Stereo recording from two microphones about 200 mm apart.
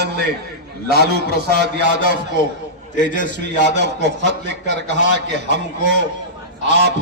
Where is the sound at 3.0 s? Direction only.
40° left (ahead or behind).